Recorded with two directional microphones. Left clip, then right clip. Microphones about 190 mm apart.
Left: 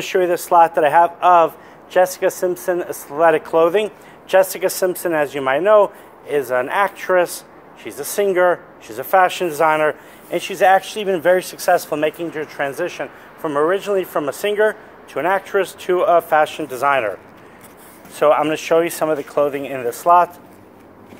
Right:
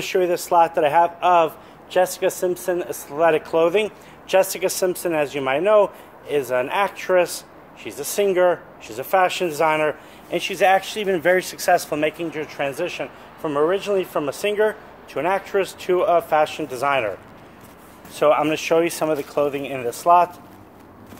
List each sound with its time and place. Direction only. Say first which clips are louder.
0.0 s speech: left 3 dB; 5° left (ahead or behind)
18.2 s speech: left 3 dB; centre (ahead or behind)